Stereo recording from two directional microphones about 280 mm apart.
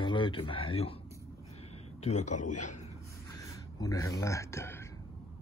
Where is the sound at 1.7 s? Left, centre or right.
Left.